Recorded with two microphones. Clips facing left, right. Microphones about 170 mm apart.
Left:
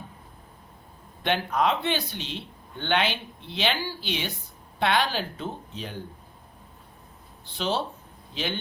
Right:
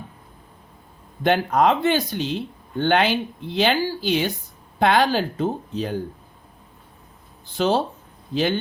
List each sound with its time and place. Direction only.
1.2 s speech: 45° right (ahead or behind)
7.5 s speech: 45° right (ahead or behind)